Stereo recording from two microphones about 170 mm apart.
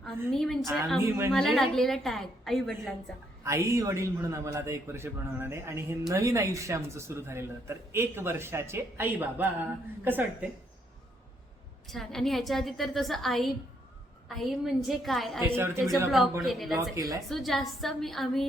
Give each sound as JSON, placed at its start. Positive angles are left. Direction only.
{"t": 0.0, "sound": "a woman's voice", "side_deg": 5}
{"t": 1.0, "sound": "a man's voice", "side_deg": -15}
{"t": 1.3, "sound": "a woman's voice", "side_deg": 0}
{"t": 3.4, "sound": "a man's voice", "side_deg": -15}
{"t": 11.9, "sound": "a woman's voice", "side_deg": 0}
{"t": 15.4, "sound": "a man's voice", "side_deg": -15}
{"t": 16.4, "sound": "a woman's voice", "side_deg": 0}
{"t": 16.9, "sound": "a woman's voice", "side_deg": -20}
{"t": 17.2, "sound": "a woman's voice", "side_deg": 0}